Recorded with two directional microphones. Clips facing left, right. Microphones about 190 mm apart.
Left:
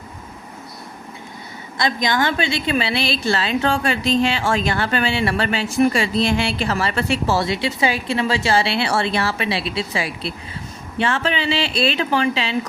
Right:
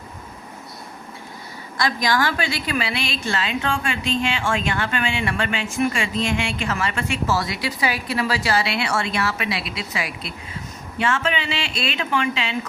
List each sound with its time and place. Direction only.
1.8 s a woman's voice: 20° left (ahead or behind)